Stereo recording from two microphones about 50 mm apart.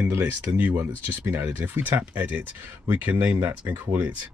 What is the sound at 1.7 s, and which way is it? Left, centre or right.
Speech, right.